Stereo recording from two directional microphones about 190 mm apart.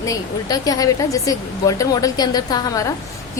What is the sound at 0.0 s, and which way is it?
A woman's voice, 20° left (ahead or behind).